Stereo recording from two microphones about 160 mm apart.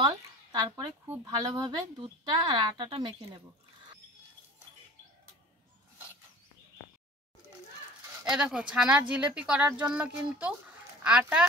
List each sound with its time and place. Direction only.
0.0 s speech: 25° right (ahead or behind)
8.3 s speech: 5° right (ahead or behind)